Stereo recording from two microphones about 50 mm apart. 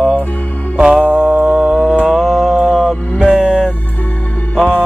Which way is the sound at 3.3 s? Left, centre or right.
Centre.